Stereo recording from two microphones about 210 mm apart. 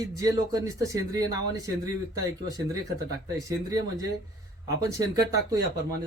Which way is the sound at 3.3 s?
15° right (ahead or behind).